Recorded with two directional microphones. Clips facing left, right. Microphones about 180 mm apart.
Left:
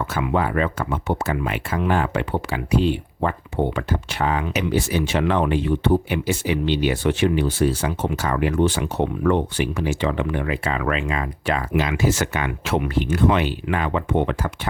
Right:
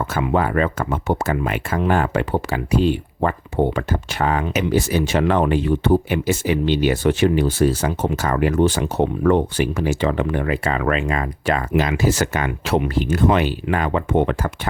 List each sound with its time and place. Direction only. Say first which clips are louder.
0.0 s speech: right 2 dB; 40° right (ahead or behind)